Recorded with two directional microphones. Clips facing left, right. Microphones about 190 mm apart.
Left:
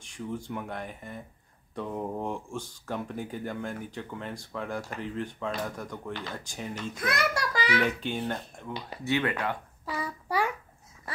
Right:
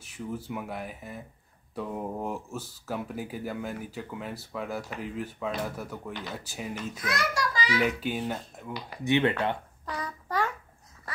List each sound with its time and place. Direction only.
0.0 s speech: 5° right (ahead or behind)
7.1 s a child's voice: 60° left (ahead or behind)
7.8 s speech: 5° right (ahead or behind)
9.0 s speech: 20° right (ahead or behind)
9.8 s child singing: 10° left (ahead or behind)